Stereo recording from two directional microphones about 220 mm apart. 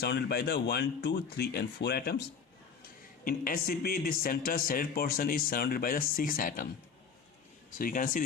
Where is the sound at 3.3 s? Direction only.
40° left (ahead or behind).